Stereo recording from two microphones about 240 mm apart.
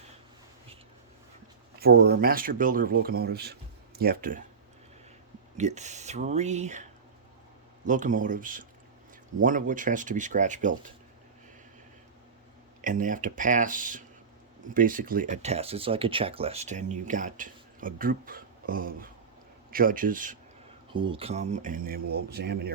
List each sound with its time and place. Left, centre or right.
1.8 s speech: right
5.5 s speech: right
7.9 s speech: right
12.8 s speech: right
20.9 s speech: right